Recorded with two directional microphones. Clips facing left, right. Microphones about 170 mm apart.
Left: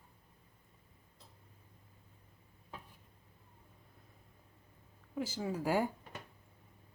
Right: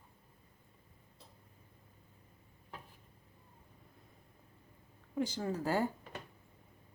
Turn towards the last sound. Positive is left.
turn(degrees=10)  # may be behind; listen again after turning